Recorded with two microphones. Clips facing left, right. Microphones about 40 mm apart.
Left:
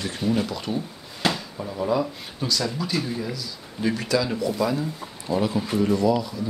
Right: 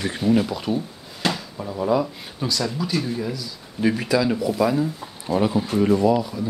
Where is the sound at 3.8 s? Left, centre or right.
Centre.